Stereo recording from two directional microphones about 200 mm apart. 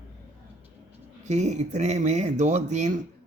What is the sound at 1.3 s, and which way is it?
Speech, 35° right (ahead or behind).